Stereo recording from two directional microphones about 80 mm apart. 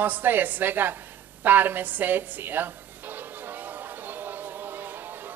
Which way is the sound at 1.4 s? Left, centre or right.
Right.